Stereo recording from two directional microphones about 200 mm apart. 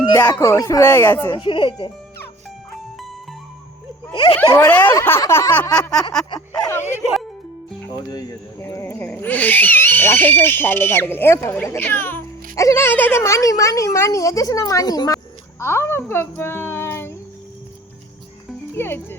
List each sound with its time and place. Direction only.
0.1 s speech: 15° left (ahead or behind)
1.4 s speech: 25° left (ahead or behind)
4.1 s speech: 25° left (ahead or behind)
4.4 s speech: 10° left (ahead or behind)
8.1 s speech: 15° left (ahead or behind)
18.7 s speech: 10° left (ahead or behind)